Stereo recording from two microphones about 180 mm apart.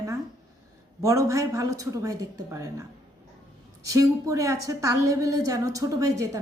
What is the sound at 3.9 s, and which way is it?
A woman's voice, 20° right (ahead or behind).